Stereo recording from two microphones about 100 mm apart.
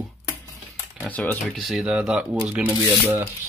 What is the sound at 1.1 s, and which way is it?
Speech, 15° left (ahead or behind).